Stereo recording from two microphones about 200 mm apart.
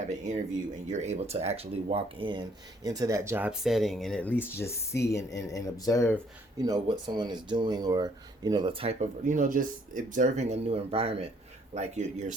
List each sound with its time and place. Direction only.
0.0 s speech: 35° right (ahead or behind); by 6.1 s 15° left (ahead or behind)
6.6 s speech: 20° right (ahead or behind); by 12.3 s 35° right (ahead or behind)